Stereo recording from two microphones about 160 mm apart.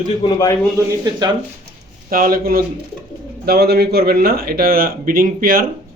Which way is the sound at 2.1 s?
65° right (ahead or behind).